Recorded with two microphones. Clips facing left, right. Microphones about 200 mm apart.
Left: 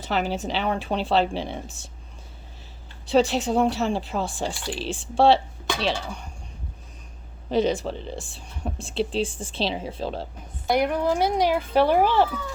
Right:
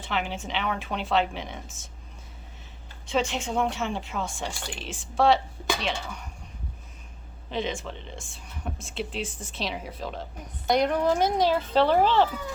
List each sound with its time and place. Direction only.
0.0 s speech: 40° left (ahead or behind)
3.1 s speech: 35° left (ahead or behind)
7.5 s speech: 40° left (ahead or behind)
10.7 s speech: 10° left (ahead or behind)